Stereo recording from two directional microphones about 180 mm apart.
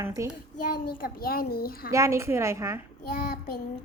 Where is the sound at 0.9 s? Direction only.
55° left (ahead or behind).